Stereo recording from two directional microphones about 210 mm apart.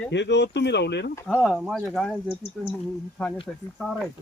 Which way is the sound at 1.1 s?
10° left (ahead or behind).